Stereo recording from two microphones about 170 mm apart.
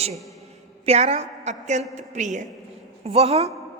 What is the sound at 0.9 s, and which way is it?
A woman's voice, 40° right (ahead or behind).